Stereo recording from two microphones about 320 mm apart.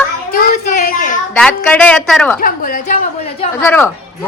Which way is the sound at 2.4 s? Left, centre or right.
Left.